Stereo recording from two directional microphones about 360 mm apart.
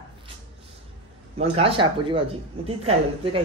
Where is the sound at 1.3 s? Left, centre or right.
Centre.